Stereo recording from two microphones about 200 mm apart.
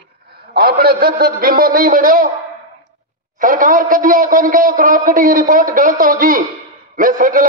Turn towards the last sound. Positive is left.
turn(degrees=-45)  # may be behind; listen again after turning